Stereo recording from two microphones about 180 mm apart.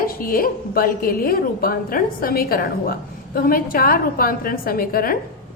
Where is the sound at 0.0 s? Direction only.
55° left (ahead or behind).